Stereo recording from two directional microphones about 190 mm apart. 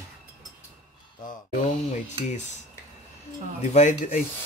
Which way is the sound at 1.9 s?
40° left (ahead or behind).